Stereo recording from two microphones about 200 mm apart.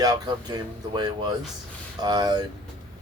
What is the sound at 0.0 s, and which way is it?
Speech, 20° right (ahead or behind).